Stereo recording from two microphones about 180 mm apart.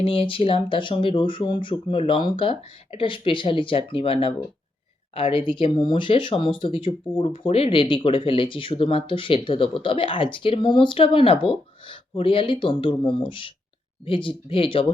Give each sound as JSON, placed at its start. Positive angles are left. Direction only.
{"t": 0.0, "sound": "speech", "side_deg": 30}